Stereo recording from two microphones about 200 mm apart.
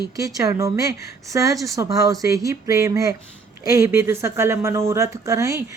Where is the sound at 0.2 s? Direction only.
15° right (ahead or behind).